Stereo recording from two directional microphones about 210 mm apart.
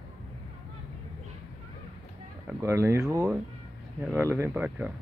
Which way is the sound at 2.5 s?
15° right (ahead or behind).